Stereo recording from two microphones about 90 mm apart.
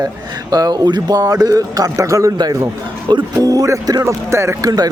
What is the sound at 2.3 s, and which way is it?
Speech, 50° right (ahead or behind).